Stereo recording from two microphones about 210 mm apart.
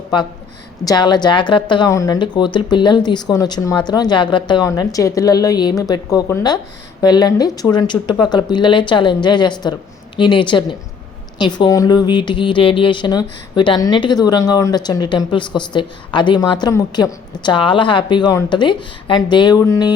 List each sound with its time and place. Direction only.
0.9 s speech: 20° left (ahead or behind)